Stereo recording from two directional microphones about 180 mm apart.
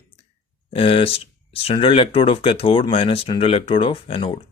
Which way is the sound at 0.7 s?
30° left (ahead or behind).